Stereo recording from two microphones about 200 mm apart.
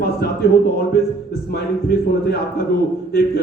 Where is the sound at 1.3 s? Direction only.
50° left (ahead or behind).